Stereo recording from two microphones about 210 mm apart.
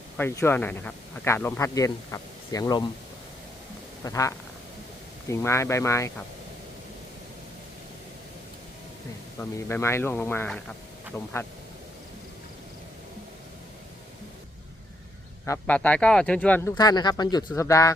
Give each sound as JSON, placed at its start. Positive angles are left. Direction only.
{"t": 0.2, "sound": "speech", "side_deg": 10}
{"t": 4.0, "sound": "speech", "side_deg": 15}
{"t": 9.4, "sound": "speech", "side_deg": 10}
{"t": 15.4, "sound": "speech", "side_deg": 5}
{"t": 16.7, "sound": "speech", "side_deg": 20}